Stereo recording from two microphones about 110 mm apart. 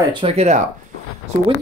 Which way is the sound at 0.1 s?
55° right (ahead or behind).